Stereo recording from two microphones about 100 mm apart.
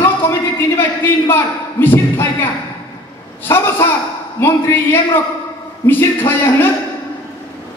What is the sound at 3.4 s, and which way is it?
A man's voice, 25° left (ahead or behind).